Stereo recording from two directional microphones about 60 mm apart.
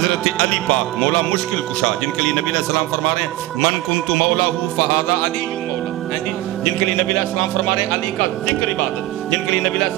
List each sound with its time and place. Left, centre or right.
0.0 s speech: centre